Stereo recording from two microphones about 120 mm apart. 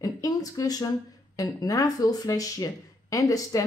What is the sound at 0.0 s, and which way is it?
Speech, 30° left (ahead or behind).